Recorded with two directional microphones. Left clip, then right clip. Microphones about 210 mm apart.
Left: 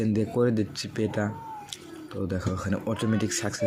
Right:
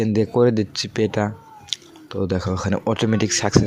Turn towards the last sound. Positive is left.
turn(degrees=-40)  # may be behind; listen again after turning